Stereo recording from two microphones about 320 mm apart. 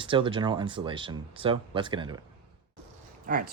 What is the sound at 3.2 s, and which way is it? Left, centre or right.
Speech, right.